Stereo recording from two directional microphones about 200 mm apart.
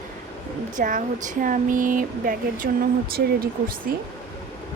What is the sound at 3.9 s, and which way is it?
Speech, 50° right (ahead or behind).